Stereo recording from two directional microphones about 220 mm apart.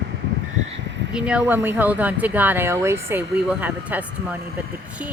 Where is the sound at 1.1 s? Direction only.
5° right (ahead or behind).